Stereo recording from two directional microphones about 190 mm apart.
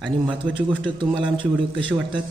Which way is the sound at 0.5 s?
25° right (ahead or behind).